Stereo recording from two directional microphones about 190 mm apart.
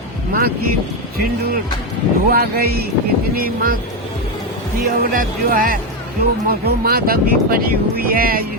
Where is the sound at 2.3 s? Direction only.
55° right (ahead or behind).